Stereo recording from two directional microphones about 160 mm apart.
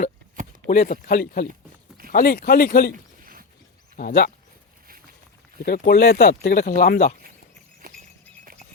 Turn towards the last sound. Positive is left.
turn(degrees=-70)  # may be behind; listen again after turning